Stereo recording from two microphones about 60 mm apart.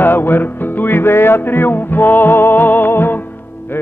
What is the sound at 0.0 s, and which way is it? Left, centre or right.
Music, left.